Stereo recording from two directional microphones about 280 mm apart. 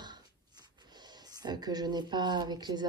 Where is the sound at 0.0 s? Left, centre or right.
Centre.